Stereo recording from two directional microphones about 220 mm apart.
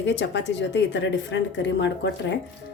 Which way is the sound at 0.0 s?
55° left (ahead or behind).